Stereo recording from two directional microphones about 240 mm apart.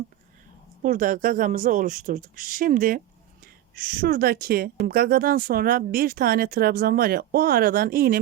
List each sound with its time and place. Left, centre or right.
0.8 s speech: right